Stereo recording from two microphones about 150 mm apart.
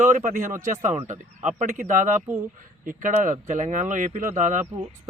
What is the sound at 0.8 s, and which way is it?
Speech, 50° right (ahead or behind).